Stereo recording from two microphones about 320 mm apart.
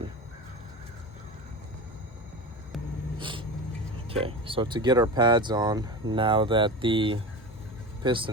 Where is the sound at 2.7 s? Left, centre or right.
Centre.